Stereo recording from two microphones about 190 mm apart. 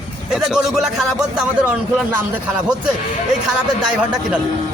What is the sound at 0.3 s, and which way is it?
Speech, centre (ahead or behind).